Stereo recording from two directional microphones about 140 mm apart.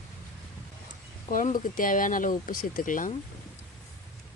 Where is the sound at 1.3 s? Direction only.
70° left (ahead or behind).